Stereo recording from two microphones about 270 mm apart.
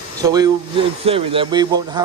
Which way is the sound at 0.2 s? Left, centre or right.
Centre.